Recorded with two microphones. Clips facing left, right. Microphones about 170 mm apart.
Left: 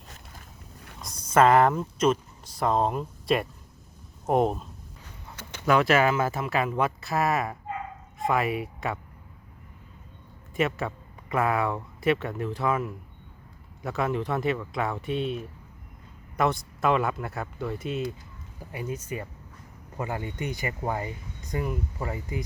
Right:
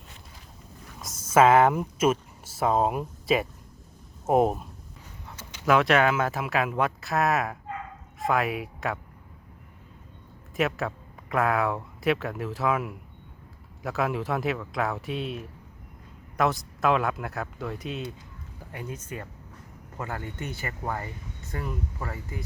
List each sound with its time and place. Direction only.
1.0 s speech: 5° right (ahead or behind)
5.4 s a sound: 55° left (ahead or behind)
5.6 s speech: centre (ahead or behind)
10.6 s speech: centre (ahead or behind); by 22.4 s 15° left (ahead or behind)